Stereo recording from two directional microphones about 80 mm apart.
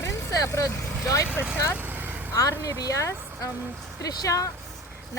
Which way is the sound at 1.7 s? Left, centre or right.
Right.